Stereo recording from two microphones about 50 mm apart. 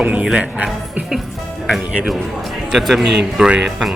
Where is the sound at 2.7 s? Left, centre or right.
Centre.